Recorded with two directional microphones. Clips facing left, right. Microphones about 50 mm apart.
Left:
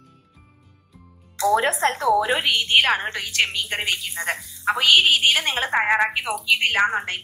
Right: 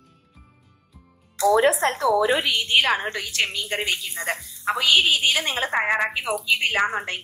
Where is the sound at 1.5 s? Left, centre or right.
Left.